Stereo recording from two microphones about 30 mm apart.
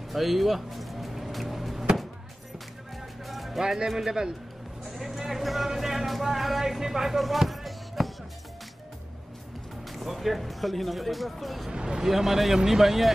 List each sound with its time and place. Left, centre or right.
0.1 s music: centre
3.3 s music: centre
3.6 s speech: centre
4.8 s music: centre
5.8 s speech: centre
9.8 s speech: centre
11.7 s speech: right
12.0 s speech: centre